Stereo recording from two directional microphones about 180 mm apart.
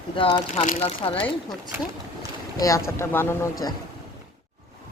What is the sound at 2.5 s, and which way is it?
Speech, 20° left (ahead or behind).